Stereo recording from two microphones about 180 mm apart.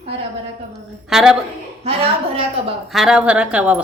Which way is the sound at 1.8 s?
35° right (ahead or behind).